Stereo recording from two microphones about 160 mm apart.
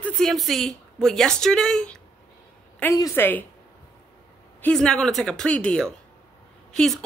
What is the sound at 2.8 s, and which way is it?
Speech, 15° left (ahead or behind).